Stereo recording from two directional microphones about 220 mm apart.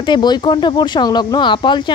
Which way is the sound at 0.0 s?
20° left (ahead or behind).